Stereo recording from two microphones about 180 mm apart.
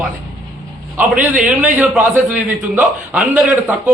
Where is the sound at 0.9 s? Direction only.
5° right (ahead or behind).